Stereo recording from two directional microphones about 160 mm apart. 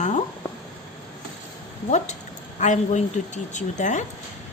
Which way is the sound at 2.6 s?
50° left (ahead or behind).